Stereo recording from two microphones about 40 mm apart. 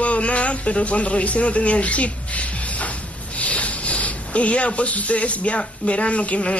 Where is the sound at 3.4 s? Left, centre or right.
Left.